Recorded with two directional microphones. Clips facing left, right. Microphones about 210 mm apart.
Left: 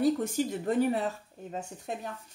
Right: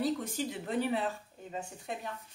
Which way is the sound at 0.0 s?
45° left (ahead or behind).